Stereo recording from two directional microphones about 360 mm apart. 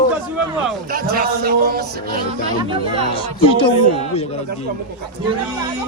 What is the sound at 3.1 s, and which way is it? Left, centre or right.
Speech, centre.